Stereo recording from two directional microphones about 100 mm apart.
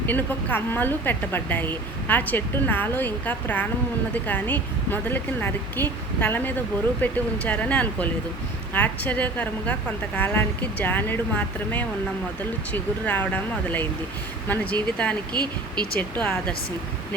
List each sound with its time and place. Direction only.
0.0 s a woman's voice: 20° left (ahead or behind)
15.3 s speech: 45° right (ahead or behind)
16.0 s a woman's voice: 10° left (ahead or behind)